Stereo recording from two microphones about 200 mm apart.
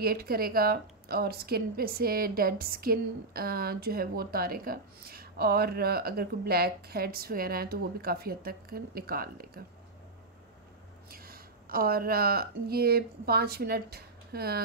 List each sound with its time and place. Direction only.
0.0 s a woman's voice: 50° right (ahead or behind)
11.1 s speech: 50° right (ahead or behind)